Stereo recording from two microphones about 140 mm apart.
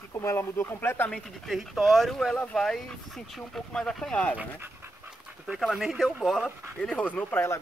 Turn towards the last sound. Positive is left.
turn(degrees=15)  # may be behind; listen again after turning